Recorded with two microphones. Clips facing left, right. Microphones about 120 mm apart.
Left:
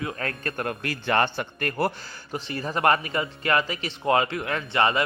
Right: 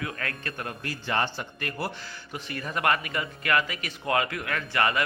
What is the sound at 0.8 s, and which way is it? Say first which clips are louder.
A man's voice: left 4 dB; 65° left (ahead or behind).